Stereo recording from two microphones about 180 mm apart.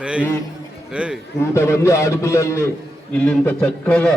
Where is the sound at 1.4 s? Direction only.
15° left (ahead or behind).